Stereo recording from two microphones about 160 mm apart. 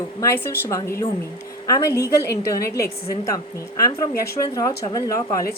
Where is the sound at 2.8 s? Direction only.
20° left (ahead or behind).